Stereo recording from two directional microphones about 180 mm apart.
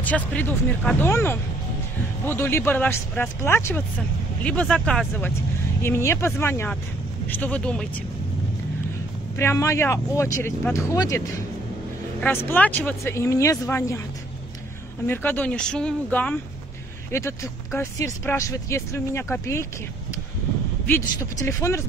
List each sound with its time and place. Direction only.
0.0 s speech: 10° left (ahead or behind)
9.4 s speech: 15° left (ahead or behind)
15.0 s speech: 10° left (ahead or behind)
20.8 s speech: 15° left (ahead or behind)